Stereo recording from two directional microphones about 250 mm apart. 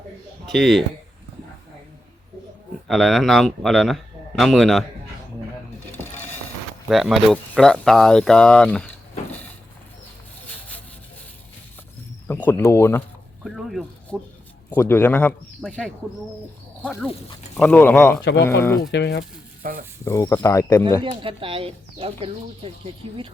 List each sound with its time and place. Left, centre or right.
0.4 s a man's voice: centre
2.8 s a man's voice: centre
6.8 s a man's voice: centre
12.3 s speech: centre
13.4 s a sound: centre
14.8 s a man's voice: centre
18.9 s speech: left
19.6 s speech: right
20.1 s speech: centre
21.0 s speech: right